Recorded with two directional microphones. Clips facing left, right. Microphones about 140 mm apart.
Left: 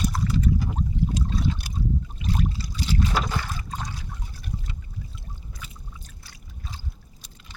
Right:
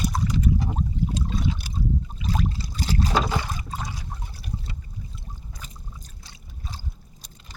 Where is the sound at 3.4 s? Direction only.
15° right (ahead or behind).